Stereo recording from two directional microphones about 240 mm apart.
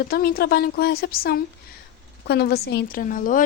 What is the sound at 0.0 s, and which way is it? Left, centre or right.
A woman's voice, left.